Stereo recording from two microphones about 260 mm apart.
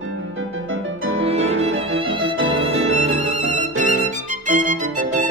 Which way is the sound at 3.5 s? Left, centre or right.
Right.